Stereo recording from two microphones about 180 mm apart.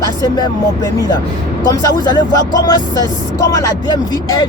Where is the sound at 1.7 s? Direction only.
25° left (ahead or behind).